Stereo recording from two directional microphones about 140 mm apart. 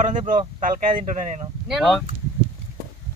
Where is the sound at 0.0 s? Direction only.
65° right (ahead or behind).